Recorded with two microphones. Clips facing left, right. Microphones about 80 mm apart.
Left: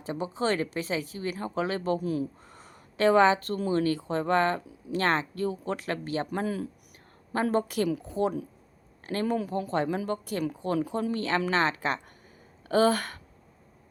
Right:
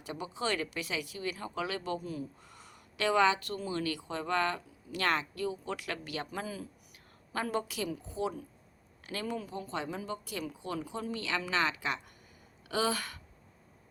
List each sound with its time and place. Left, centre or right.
0.0 s speech: left
2.0 s speech: left
2.4 s a sound: left
3.7 s speech: left
6.4 s speech: left
10.8 s speech: left
12.6 s a sound: left